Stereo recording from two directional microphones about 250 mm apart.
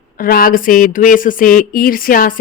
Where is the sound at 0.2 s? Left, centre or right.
Left.